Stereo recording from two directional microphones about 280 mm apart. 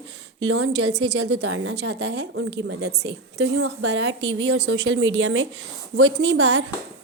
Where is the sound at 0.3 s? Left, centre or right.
Right.